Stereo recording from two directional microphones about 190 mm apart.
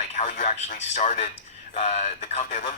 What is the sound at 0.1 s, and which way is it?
Speech, 40° left (ahead or behind).